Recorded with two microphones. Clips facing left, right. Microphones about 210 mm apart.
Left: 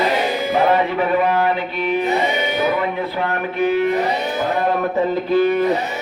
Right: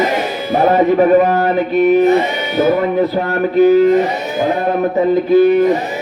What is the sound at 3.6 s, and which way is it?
Speech, 40° right (ahead or behind).